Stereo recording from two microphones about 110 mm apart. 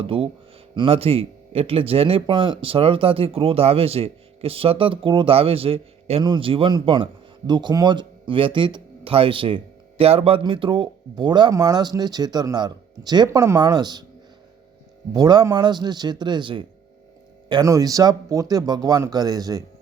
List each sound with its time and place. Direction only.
0.0 s speech: 55° right (ahead or behind)
6.2 s a man's voice: 50° right (ahead or behind)
10.0 s speech: 65° right (ahead or behind)
10.4 s speech: 50° right (ahead or behind)
15.1 s speech: 35° right (ahead or behind)
17.5 s speech: 35° right (ahead or behind)